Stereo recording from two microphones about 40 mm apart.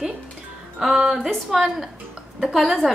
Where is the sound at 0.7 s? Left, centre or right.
Centre.